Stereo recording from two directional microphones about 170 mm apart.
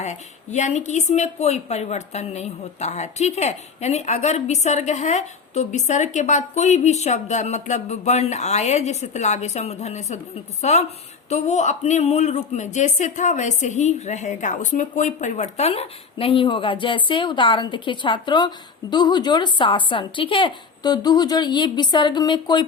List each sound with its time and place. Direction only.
0.0 s a woman's voice: 45° left (ahead or behind); by 22.6 s 25° left (ahead or behind)